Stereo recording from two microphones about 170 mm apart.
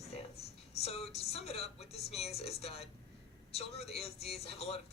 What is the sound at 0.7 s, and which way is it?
Speech, 35° left (ahead or behind).